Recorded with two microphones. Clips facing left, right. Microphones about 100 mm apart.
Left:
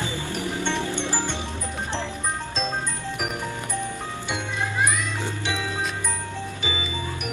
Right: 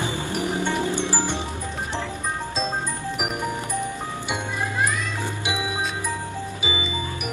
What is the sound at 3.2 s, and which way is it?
Music, 10° right (ahead or behind).